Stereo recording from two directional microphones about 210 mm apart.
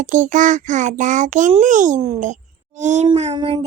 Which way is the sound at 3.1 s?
25° right (ahead or behind).